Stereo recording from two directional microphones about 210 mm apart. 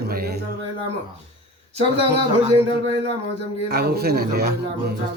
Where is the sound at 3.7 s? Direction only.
50° right (ahead or behind).